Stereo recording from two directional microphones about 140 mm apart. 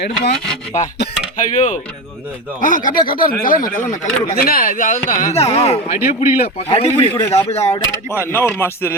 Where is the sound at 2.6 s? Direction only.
70° left (ahead or behind).